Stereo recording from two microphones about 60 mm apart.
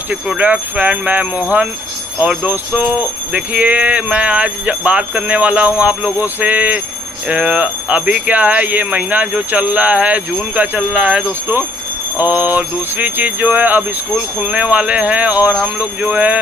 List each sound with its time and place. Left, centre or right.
0.1 s speech: right
12.3 s speech: right